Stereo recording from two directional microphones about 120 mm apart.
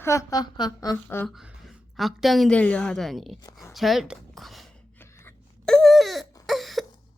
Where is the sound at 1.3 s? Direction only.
5° right (ahead or behind).